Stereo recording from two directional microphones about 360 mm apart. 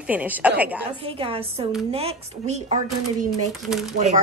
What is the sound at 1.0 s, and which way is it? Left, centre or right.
Speech, centre.